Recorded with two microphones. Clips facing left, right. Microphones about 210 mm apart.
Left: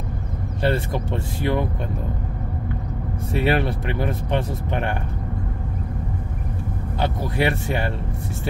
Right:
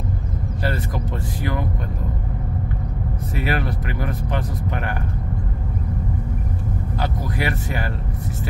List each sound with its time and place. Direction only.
0.6 s speech: 25° left (ahead or behind)
3.3 s speech: 25° left (ahead or behind)
7.0 s speech: 25° left (ahead or behind)